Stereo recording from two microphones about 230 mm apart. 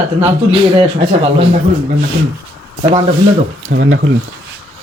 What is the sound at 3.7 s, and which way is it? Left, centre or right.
Speech, right.